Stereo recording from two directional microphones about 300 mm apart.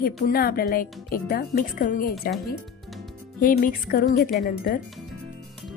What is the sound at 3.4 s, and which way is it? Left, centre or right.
Speech, left.